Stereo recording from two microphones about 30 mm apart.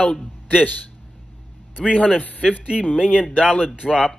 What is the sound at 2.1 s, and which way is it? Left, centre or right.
Speech, left.